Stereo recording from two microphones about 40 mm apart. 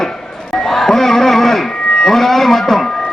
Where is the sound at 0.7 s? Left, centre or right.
Centre.